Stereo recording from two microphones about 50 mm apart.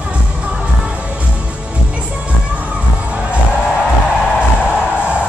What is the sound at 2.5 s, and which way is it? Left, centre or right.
Crowd, right.